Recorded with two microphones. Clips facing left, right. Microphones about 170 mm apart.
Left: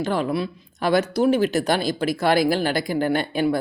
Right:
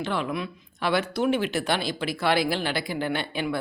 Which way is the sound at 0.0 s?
40° left (ahead or behind).